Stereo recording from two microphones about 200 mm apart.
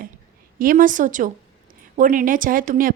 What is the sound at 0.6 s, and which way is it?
A woman's voice, 45° right (ahead or behind).